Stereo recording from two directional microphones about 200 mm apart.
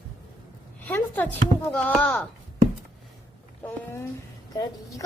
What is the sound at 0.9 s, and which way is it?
A child's voice, 10° left (ahead or behind).